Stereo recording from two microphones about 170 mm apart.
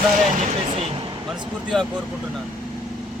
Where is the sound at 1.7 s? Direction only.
Centre (ahead or behind).